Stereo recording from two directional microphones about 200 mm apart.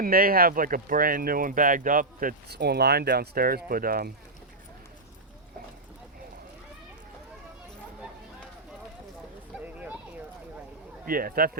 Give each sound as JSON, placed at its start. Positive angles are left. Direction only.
{"t": 0.0, "sound": "speech", "side_deg": -45}
{"t": 9.6, "sound": "a sound", "side_deg": -5}
{"t": 11.0, "sound": "speech", "side_deg": -45}